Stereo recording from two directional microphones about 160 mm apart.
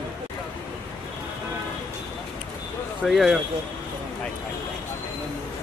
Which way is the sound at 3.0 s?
Centre (ahead or behind).